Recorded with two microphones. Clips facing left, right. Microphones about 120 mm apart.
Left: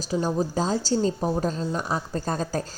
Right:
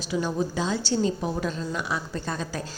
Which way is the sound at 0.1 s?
35° left (ahead or behind).